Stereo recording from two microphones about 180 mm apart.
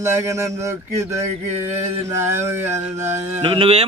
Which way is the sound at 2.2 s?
15° right (ahead or behind).